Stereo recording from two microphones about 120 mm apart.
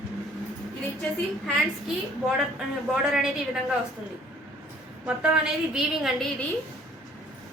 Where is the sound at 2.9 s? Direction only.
5° right (ahead or behind).